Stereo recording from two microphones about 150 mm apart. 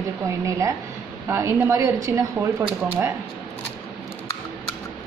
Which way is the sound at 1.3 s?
15° right (ahead or behind).